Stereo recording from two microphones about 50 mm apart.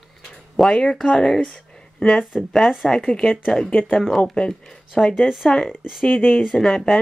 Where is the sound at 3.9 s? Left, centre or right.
Centre.